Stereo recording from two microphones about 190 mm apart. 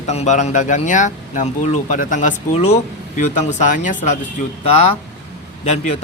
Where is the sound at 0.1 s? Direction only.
35° left (ahead or behind).